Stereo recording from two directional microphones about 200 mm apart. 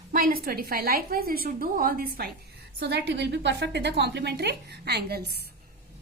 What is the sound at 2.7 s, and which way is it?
A woman's voice, 60° right (ahead or behind).